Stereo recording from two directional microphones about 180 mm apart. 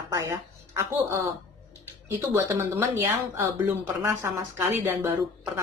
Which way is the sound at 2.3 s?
15° right (ahead or behind).